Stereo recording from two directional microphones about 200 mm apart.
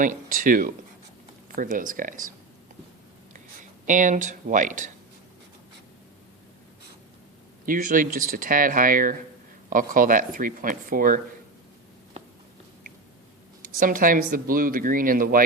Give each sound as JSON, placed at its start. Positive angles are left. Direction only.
{"t": 0.0, "sound": "speech", "side_deg": -40}
{"t": 3.8, "sound": "speech", "side_deg": -40}
{"t": 7.6, "sound": "speech", "side_deg": -40}
{"t": 13.6, "sound": "speech", "side_deg": -45}